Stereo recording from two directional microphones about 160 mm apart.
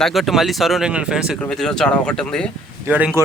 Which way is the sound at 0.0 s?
Centre (ahead or behind).